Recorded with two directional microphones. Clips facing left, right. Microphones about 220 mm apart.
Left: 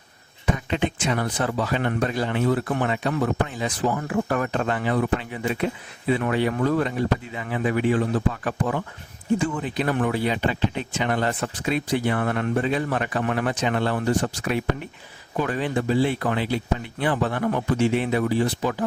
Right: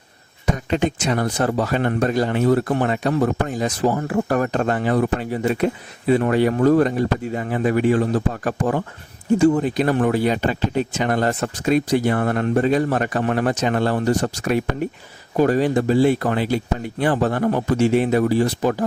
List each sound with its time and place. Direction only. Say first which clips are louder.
0.5 s speech: right 4 dB; 40° right (ahead or behind)